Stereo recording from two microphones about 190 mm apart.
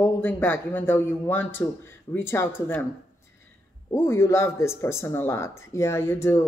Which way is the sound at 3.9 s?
15° left (ahead or behind).